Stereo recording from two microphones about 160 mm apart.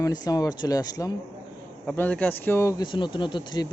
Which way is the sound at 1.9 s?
10° left (ahead or behind).